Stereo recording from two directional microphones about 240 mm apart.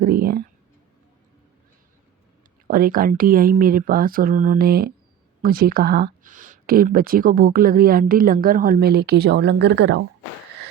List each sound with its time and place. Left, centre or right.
0.0 s speech: right
2.6 s speech: right